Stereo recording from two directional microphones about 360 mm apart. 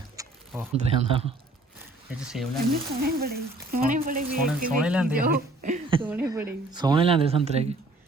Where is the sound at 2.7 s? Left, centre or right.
Right.